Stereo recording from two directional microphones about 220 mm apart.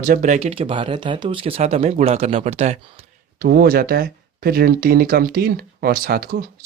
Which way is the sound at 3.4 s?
45° right (ahead or behind).